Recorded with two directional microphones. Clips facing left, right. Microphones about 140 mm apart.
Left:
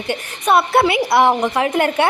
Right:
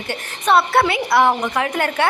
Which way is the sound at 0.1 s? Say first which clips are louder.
Left 1 dB; 15° left (ahead or behind).